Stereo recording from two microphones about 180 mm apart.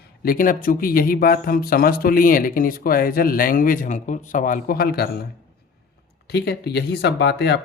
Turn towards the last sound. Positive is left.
turn(degrees=70)  # may be behind; listen again after turning